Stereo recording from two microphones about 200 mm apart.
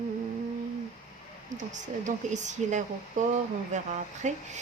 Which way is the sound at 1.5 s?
40° right (ahead or behind).